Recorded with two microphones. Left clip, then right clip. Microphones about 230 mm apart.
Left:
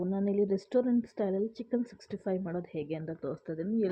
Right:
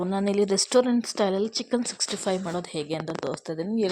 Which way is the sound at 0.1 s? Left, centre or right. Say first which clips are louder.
Right 6 dB; centre.